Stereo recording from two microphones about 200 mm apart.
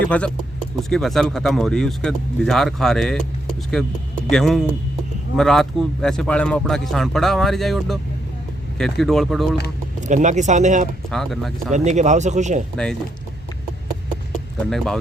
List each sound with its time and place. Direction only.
0.1 s speech: 5° left (ahead or behind)
10.1 s speech: 35° right (ahead or behind)
11.1 s speech: centre (ahead or behind)
11.7 s speech: 35° right (ahead or behind)
12.7 s speech: 5° left (ahead or behind)